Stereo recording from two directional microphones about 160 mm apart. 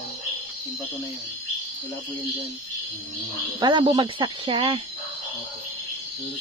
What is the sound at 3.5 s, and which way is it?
Speech, 30° right (ahead or behind).